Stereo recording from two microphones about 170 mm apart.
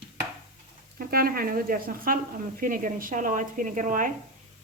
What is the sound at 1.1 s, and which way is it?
Speech, 60° right (ahead or behind).